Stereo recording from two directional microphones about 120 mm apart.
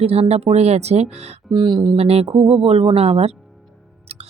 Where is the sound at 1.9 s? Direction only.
60° right (ahead or behind).